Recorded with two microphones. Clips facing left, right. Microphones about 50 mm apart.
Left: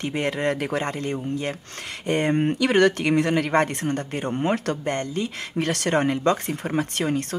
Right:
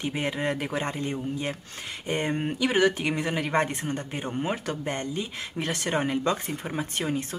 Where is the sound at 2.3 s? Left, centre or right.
Centre.